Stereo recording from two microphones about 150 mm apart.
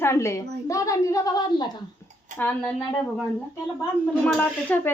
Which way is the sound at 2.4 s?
10° left (ahead or behind).